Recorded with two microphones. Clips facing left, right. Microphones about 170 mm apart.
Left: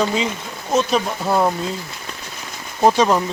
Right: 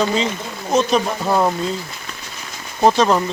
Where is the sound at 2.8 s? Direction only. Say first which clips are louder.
Even; 10° left (ahead or behind).